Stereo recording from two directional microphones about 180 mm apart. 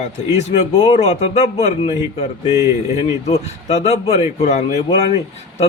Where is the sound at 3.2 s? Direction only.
35° left (ahead or behind).